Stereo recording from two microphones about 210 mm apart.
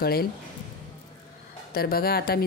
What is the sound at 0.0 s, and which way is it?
Speech, 45° left (ahead or behind).